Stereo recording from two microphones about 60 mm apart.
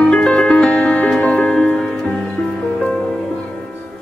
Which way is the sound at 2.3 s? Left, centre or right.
Centre.